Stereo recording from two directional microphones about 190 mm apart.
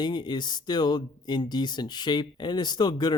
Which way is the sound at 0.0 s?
25° left (ahead or behind).